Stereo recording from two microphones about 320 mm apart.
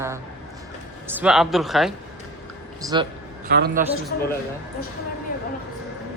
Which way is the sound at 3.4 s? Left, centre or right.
Right.